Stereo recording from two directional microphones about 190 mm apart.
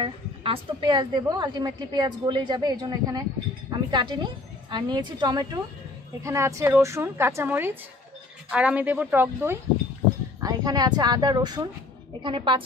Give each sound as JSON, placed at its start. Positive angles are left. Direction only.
{"t": 0.0, "sound": "a woman's voice", "side_deg": -30}